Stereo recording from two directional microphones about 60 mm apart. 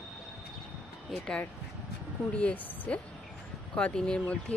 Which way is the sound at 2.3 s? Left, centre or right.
Centre.